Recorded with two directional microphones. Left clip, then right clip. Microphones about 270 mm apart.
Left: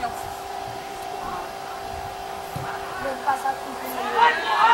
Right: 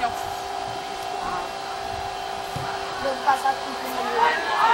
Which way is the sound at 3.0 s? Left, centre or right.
Centre.